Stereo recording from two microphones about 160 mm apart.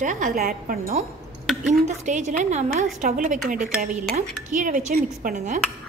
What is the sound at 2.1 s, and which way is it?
A woman's voice, 50° right (ahead or behind).